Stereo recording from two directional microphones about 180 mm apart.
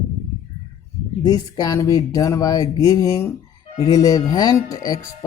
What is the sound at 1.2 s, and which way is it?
Speech, 20° left (ahead or behind).